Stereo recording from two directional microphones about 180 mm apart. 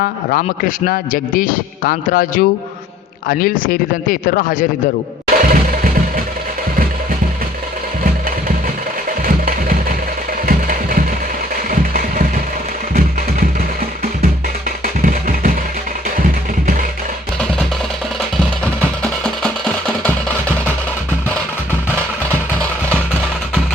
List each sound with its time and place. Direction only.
0.0 s speech: 50° left (ahead or behind)
5.4 s music: 50° right (ahead or behind)
9.2 s music: 50° right (ahead or behind)
11.7 s a sound: 50° right (ahead or behind)
15.0 s a sound: 50° right (ahead or behind)
19.2 s music: 5° left (ahead or behind)